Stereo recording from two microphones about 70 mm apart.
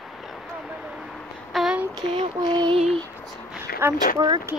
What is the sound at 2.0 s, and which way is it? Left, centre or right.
Child singing, right.